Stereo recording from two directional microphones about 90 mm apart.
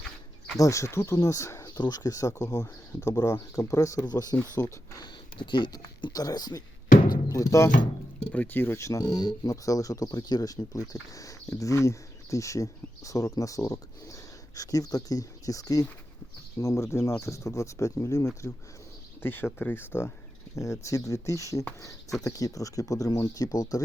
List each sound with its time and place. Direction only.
0.6 s speech: 35° left (ahead or behind)
4.0 s speech: 45° left (ahead or behind)
4.6 s speech: 35° left (ahead or behind)
5.4 s speech: 60° left (ahead or behind)
6.1 s speech: 45° left (ahead or behind)
8.3 s speech: 20° left (ahead or behind); by 18.3 s 35° left (ahead or behind)
19.2 s speech: 25° left (ahead or behind)
20.6 s speech: 35° left (ahead or behind)